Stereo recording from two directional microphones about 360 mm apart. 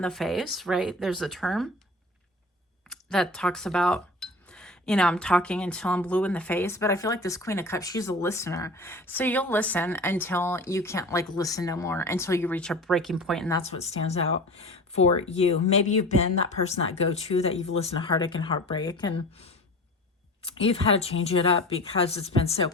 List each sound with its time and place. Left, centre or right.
0.0 s speech: centre
2.9 s speech: centre